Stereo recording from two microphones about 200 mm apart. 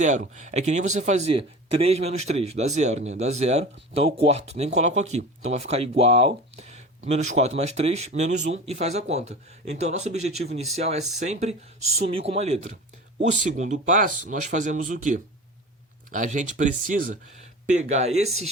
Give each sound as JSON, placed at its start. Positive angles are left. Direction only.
{"t": 0.0, "sound": "speech", "side_deg": -40}